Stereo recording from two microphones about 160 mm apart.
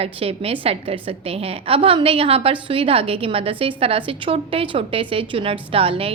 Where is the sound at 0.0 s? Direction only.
35° right (ahead or behind).